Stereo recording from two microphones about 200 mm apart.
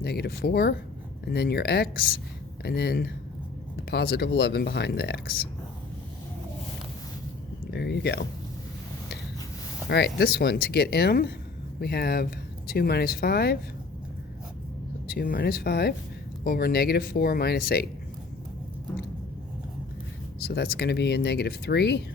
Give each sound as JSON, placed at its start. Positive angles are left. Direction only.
{"t": 0.0, "sound": "speech", "side_deg": 50}
{"t": 7.7, "sound": "speech", "side_deg": 55}
{"t": 9.9, "sound": "speech", "side_deg": 55}
{"t": 15.0, "sound": "speech", "side_deg": 45}
{"t": 20.4, "sound": "speech", "side_deg": 50}